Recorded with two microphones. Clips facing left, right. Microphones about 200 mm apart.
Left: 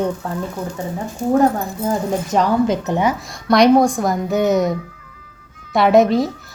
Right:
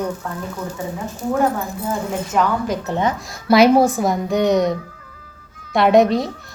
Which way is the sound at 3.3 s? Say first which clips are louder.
Even; 5° right (ahead or behind).